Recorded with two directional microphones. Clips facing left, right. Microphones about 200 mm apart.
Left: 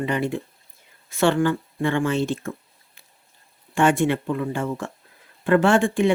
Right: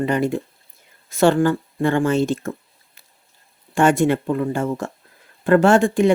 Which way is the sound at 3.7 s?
40° right (ahead or behind).